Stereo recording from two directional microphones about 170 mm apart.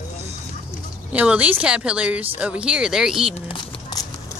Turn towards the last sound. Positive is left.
turn(degrees=30)  # may be behind; listen again after turning